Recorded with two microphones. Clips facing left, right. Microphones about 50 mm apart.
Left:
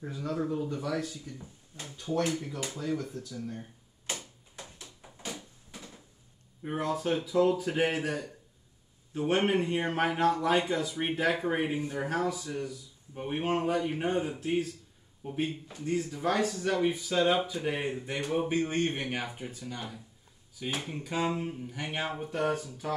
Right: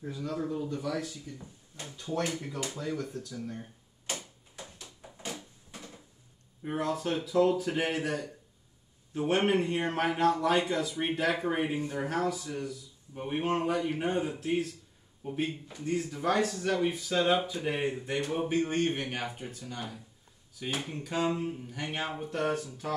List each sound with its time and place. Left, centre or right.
0.1 s speech: centre
0.7 s speech: centre
0.9 s speech: centre
2.3 s speech: centre
3.0 s speech: centre
3.3 s speech: centre
6.6 s speech: centre